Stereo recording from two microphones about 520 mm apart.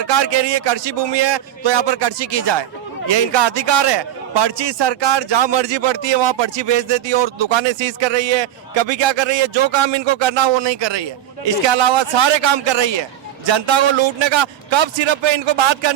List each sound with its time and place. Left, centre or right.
0.0 s a man's voice: right